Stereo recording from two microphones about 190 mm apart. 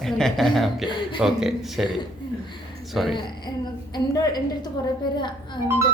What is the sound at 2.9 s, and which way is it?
Speech, centre (ahead or behind).